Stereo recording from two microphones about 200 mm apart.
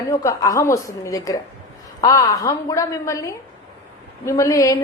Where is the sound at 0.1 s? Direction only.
15° left (ahead or behind).